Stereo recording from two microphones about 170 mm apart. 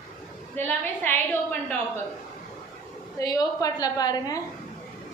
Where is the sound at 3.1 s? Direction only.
20° left (ahead or behind).